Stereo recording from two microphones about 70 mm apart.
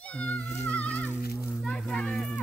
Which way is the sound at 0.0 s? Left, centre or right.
Centre.